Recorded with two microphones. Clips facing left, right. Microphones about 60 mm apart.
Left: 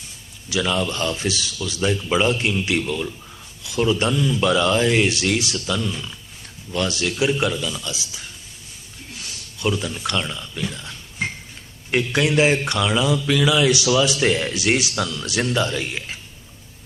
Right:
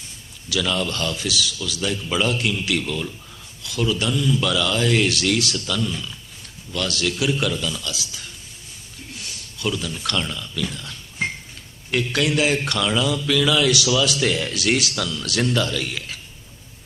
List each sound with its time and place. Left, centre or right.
0.5 s speech: left
7.5 s speech: centre
9.6 s speech: left